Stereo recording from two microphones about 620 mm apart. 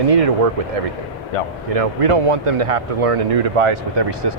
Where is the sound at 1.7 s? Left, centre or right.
Right.